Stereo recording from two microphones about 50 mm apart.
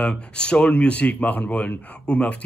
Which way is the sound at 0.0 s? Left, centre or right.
Left.